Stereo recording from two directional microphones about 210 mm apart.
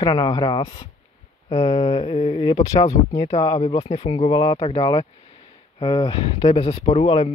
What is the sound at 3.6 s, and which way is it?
Speech, 30° left (ahead or behind).